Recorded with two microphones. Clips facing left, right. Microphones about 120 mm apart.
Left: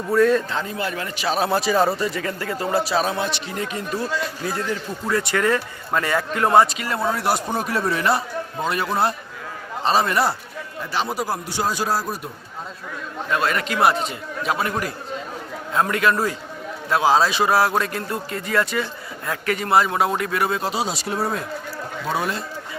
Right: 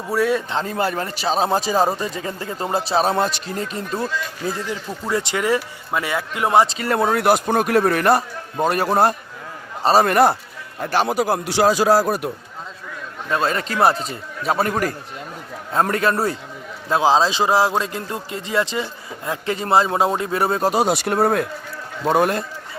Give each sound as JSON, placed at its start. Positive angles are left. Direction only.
{"t": 0.1, "sound": "speech", "side_deg": -10}
{"t": 0.7, "sound": "speech", "side_deg": -40}
{"t": 1.5, "sound": "a man's voice", "side_deg": -20}
{"t": 4.4, "sound": "speech", "side_deg": -20}
{"t": 6.8, "sound": "a man's voice", "side_deg": -55}
{"t": 8.6, "sound": "a man's voice", "side_deg": -45}
{"t": 13.3, "sound": "a man's voice", "side_deg": -30}